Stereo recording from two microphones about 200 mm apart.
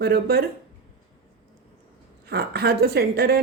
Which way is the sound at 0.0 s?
50° right (ahead or behind).